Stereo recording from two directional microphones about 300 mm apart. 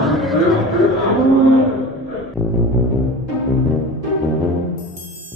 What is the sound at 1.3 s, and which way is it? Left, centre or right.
Cattle, right.